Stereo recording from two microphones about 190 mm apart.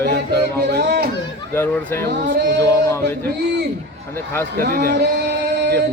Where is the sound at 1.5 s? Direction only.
10° left (ahead or behind).